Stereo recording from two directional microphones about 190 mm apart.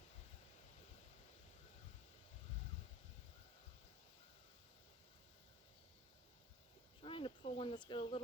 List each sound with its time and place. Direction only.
7.0 s cricket: 30° left (ahead or behind)